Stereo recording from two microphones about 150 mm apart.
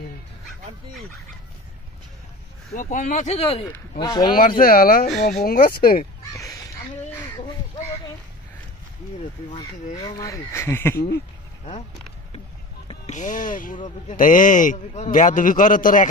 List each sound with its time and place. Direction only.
2.7 s speech: 60° left (ahead or behind); by 3.6 s 40° left (ahead or behind)
4.0 s speech: 25° left (ahead or behind)
4.3 s speech: 70° left (ahead or behind)
9.9 s speech: 20° left (ahead or behind)
13.0 s a man's voice: 55° left (ahead or behind)